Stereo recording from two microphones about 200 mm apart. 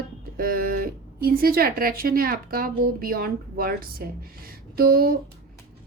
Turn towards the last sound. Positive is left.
turn(degrees=-45)  # may be behind; listen again after turning